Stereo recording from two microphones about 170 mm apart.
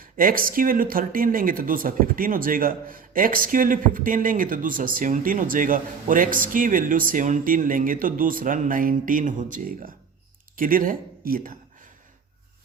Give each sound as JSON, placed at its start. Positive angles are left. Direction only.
{"t": 0.0, "sound": "speech", "side_deg": -55}